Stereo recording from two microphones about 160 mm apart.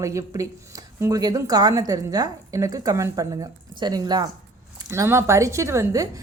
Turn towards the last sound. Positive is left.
turn(degrees=-20)  # may be behind; listen again after turning